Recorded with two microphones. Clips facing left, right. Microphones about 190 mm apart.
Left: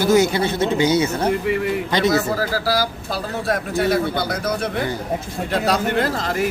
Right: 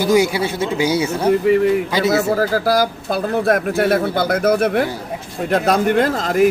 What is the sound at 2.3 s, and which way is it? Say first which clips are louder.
Speech: right 5 dB; 50° right (ahead or behind).